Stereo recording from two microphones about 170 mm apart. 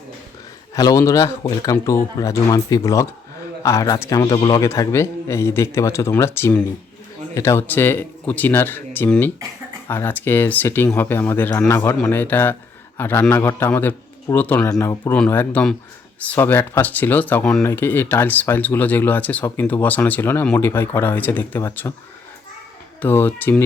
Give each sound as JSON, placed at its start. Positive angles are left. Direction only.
{"t": 0.7, "sound": "speech", "side_deg": 20}
{"t": 23.0, "sound": "speech", "side_deg": 10}